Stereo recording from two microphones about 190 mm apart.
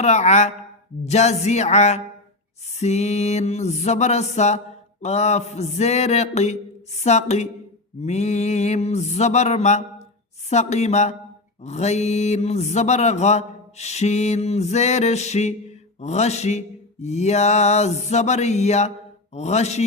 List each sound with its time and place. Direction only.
0.0 s speech: 35° left (ahead or behind)